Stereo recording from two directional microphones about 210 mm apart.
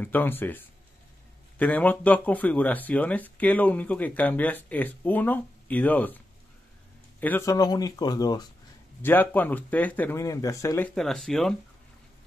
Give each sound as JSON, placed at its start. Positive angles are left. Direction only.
{"t": 0.0, "sound": "speech", "side_deg": 10}
{"t": 9.0, "sound": "speech", "side_deg": 10}
{"t": 11.0, "sound": "speech", "side_deg": 0}